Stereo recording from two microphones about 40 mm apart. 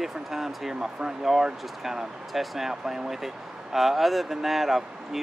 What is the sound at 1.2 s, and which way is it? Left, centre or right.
Speech, centre.